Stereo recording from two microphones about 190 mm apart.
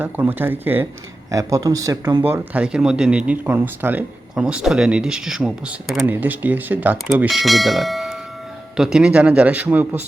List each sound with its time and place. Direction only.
0.0 s speech: 10° right (ahead or behind)
2.2 s speech: 10° right (ahead or behind)